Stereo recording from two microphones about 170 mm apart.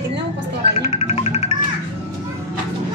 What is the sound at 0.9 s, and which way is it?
Music, 35° left (ahead or behind).